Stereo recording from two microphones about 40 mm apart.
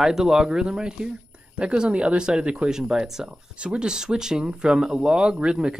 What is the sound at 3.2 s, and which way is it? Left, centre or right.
Speech, right.